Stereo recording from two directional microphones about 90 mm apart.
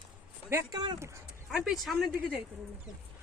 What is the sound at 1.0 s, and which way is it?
Speech, 30° right (ahead or behind).